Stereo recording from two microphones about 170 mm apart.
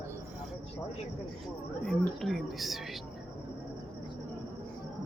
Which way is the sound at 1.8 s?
5° left (ahead or behind).